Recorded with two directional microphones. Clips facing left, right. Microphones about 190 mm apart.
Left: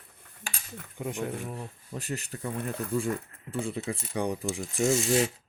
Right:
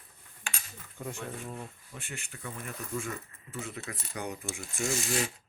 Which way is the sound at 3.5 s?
30° left (ahead or behind).